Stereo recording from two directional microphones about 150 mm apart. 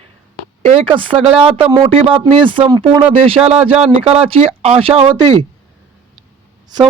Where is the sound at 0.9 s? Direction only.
35° right (ahead or behind).